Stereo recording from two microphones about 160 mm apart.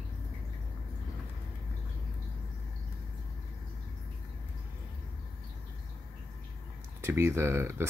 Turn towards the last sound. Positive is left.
turn(degrees=-15)  # may be behind; listen again after turning